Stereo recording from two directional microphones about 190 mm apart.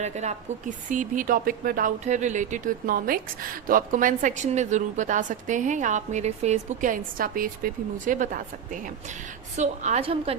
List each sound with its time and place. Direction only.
0.0 s speech: 40° right (ahead or behind)